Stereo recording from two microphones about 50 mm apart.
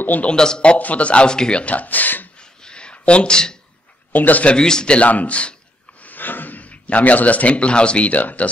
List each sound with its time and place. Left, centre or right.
0.0 s a man's voice: left
0.3 s speech: centre
0.7 s speech: left
2.3 s a sound: centre
4.1 s speech: left
4.6 s speech: centre
6.0 s a man's voice: left